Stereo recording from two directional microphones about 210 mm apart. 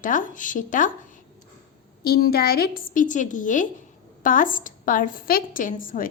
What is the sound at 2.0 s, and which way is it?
A woman's voice, 45° left (ahead or behind).